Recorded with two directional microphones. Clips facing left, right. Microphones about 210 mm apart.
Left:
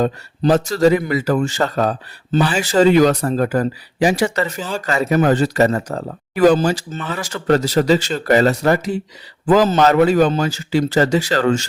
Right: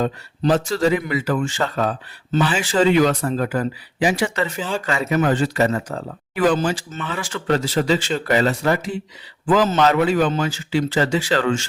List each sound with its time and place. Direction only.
0.0 s speech: 40° left (ahead or behind)